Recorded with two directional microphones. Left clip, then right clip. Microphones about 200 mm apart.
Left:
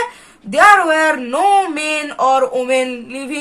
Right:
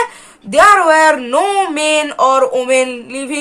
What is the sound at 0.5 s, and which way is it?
Speech, 30° right (ahead or behind).